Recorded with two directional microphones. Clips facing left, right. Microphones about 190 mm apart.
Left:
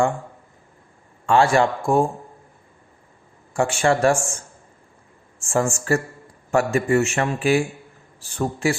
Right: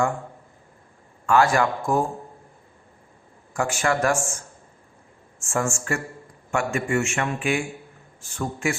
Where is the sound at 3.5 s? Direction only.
30° left (ahead or behind).